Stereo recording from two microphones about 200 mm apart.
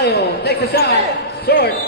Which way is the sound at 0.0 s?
55° left (ahead or behind).